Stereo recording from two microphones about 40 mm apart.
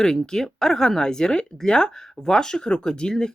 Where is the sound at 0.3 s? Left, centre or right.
Centre.